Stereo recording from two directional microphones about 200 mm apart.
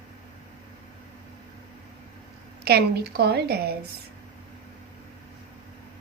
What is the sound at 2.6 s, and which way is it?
Speech, 55° right (ahead or behind).